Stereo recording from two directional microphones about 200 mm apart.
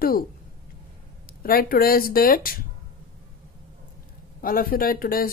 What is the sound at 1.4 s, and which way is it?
Speech, 45° left (ahead or behind).